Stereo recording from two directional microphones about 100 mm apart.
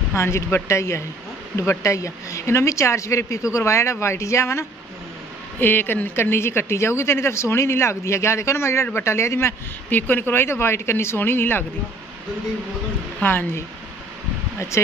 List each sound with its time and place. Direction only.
0.1 s speech: 25° left (ahead or behind)
13.2 s speech: 20° left (ahead or behind)